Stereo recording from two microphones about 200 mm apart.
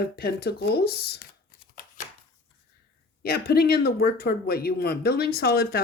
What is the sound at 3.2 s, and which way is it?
Speech, 50° left (ahead or behind).